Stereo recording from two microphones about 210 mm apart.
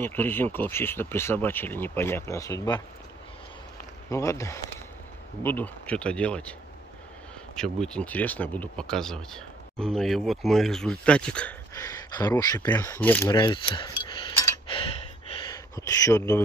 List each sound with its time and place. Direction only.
0.0 s speech: 10° left (ahead or behind)
4.1 s speech: 15° left (ahead or behind)
7.5 s speech: 5° left (ahead or behind)
13.3 s cutlery: 20° left (ahead or behind)
15.7 s speech: 15° left (ahead or behind)